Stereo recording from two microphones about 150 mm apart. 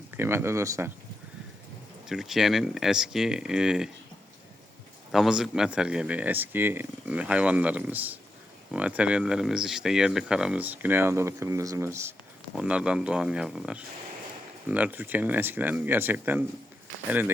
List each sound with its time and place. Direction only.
0.2 s speech: 15° right (ahead or behind)
2.0 s speech: 5° right (ahead or behind)
5.1 s speech: 5° right (ahead or behind)
12.5 s speech: 5° right (ahead or behind)